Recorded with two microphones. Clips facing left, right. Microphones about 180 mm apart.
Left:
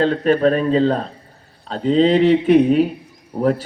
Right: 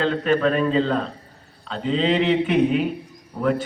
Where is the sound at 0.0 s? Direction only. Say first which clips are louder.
Left 4 dB; 40° left (ahead or behind).